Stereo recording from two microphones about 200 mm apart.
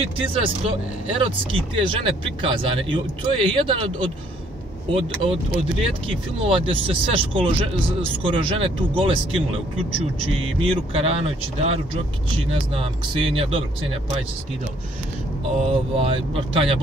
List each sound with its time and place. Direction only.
0.3 s speech: 25° right (ahead or behind)
5.2 s speech: 30° right (ahead or behind)
10.6 s speech: 25° right (ahead or behind)
15.6 s speech: 30° right (ahead or behind)